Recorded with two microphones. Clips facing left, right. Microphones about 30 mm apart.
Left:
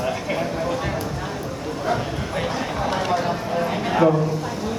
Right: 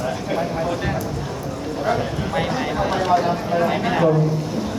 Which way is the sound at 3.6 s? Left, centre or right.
Centre.